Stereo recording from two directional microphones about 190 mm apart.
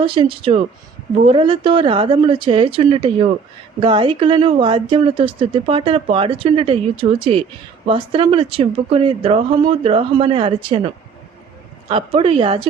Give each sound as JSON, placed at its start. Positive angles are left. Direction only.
{"t": 0.0, "sound": "speech", "side_deg": -25}